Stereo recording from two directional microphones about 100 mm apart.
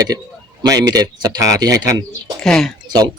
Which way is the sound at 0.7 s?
40° right (ahead or behind).